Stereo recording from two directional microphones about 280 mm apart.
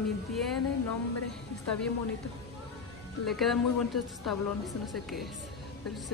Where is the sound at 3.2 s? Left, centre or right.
Centre.